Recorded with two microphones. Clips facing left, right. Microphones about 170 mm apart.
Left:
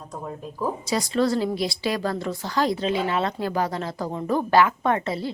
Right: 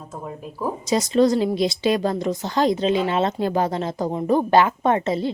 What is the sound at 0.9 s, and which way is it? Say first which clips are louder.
Speech: right 6 dB; 20° right (ahead or behind).